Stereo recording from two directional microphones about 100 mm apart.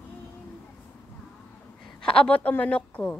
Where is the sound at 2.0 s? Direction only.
10° left (ahead or behind).